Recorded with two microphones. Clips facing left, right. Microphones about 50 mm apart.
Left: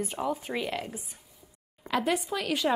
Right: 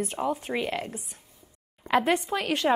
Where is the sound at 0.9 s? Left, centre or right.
Centre.